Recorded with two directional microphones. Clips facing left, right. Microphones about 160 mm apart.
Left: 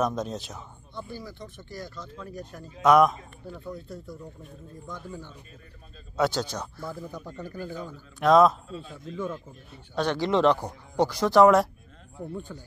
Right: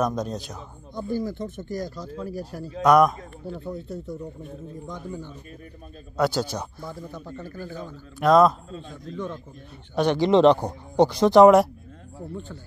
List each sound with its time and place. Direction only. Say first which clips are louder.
0.0 s a man's voice: right 2 dB; 5° left (ahead or behind)
0.9 s speech: right 11 dB; 45° right (ahead or behind)
2.8 s a man's voice: right 2 dB; 5° left (ahead or behind)
3.2 s a man's voice: right 6 dB; 30° right (ahead or behind)
6.1 s a man's voice: right 2 dB; 5° right (ahead or behind)
6.9 s a man's voice: right 1 dB; 10° left (ahead or behind)
8.2 s a man's voice: right 1 dB; centre (ahead or behind)
9.9 s speech: right 6 dB; 15° right (ahead or behind)